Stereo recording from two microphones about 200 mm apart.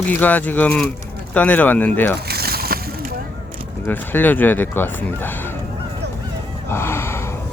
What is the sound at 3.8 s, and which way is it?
Speech, 10° left (ahead or behind).